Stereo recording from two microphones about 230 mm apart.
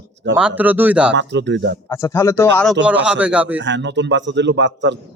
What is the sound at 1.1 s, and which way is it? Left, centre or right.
Speech, right.